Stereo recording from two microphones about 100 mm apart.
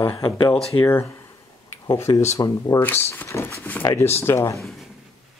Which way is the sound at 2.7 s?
20° left (ahead or behind).